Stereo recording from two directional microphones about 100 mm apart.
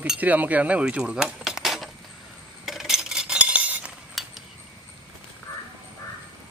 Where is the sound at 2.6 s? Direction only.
5° right (ahead or behind).